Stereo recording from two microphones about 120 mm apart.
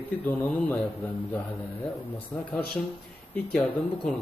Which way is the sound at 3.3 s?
10° left (ahead or behind).